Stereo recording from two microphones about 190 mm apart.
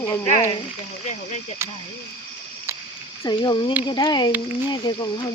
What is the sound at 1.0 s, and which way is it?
Speech, 40° left (ahead or behind).